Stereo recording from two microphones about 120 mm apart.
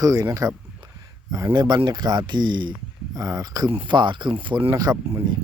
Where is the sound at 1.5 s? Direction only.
35° right (ahead or behind).